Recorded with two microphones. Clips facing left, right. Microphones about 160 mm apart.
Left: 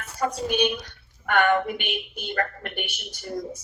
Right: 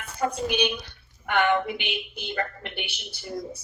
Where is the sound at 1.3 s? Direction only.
45° left (ahead or behind).